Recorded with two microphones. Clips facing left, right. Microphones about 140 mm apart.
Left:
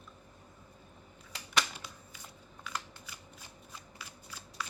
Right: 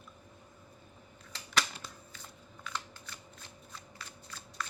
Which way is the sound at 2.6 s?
10° left (ahead or behind).